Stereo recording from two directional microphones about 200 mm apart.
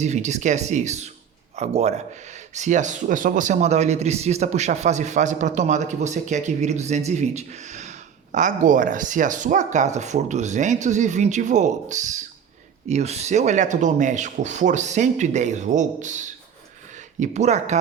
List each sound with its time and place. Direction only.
0.0 s a man's voice: 35° right (ahead or behind)